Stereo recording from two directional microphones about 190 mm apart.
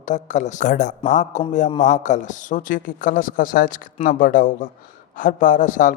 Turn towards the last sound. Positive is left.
turn(degrees=45)  # may be behind; listen again after turning